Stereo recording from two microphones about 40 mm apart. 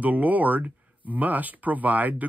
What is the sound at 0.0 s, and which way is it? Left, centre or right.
Speech, right.